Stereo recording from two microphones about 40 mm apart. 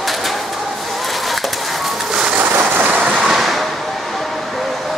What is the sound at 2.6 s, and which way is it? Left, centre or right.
Train, right.